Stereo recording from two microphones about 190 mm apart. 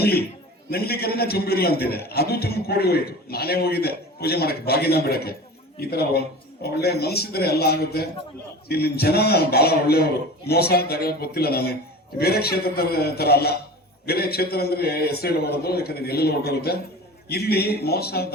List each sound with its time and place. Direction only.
0.0 s a man's voice: 55° left (ahead or behind)